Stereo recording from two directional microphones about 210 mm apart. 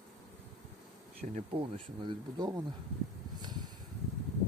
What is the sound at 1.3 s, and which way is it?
Speech, 25° right (ahead or behind).